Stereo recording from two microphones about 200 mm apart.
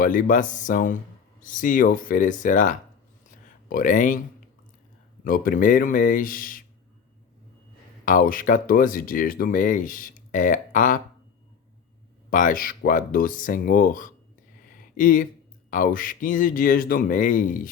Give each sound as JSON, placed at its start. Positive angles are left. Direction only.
{"t": 0.0, "sound": "speech", "side_deg": 40}
{"t": 5.2, "sound": "speech", "side_deg": 45}
{"t": 8.0, "sound": "speech", "side_deg": 45}
{"t": 12.3, "sound": "speech", "side_deg": 40}
{"t": 14.7, "sound": "a sound", "side_deg": 45}
{"t": 15.7, "sound": "speech", "side_deg": 45}